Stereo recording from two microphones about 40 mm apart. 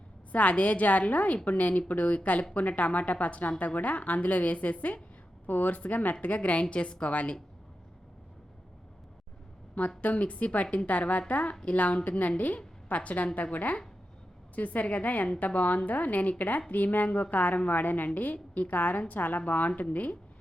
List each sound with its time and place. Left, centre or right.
0.3 s speech: left
5.5 s speech: left
10.0 s speech: left